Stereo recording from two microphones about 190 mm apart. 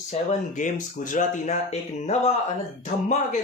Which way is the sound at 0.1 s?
40° left (ahead or behind).